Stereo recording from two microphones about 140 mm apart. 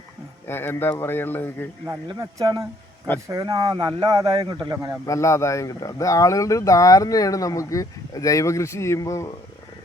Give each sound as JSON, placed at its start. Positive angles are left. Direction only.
{"t": 0.4, "sound": "a man's voice", "side_deg": 15}
{"t": 1.9, "sound": "speech", "side_deg": -25}
{"t": 5.0, "sound": "speech", "side_deg": 20}